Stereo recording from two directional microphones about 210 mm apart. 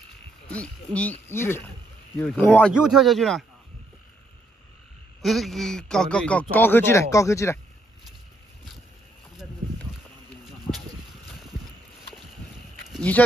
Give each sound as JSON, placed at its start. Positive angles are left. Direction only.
{"t": 0.5, "sound": "speech", "side_deg": 5}
{"t": 5.2, "sound": "speech", "side_deg": 0}
{"t": 12.9, "sound": "speech", "side_deg": 5}